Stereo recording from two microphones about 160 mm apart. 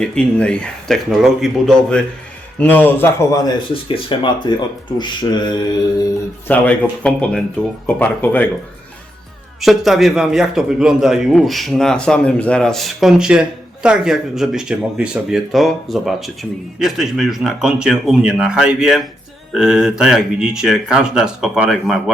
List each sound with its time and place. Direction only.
0.0 s a man's voice: 5° left (ahead or behind); by 5.5 s 25° left (ahead or behind)
6.5 s a man's voice: 10° left (ahead or behind)
9.6 s speech: centre (ahead or behind)